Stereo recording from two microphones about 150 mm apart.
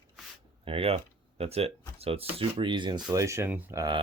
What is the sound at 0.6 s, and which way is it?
Speech, 40° right (ahead or behind).